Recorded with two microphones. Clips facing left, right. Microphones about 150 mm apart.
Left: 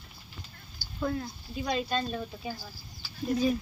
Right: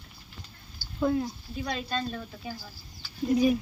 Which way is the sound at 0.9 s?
20° right (ahead or behind).